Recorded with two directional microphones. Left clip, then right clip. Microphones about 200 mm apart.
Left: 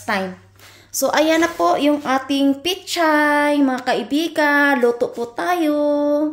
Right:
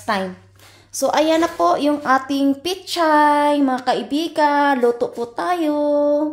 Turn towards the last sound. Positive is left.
turn(degrees=0)  # may be behind; listen again after turning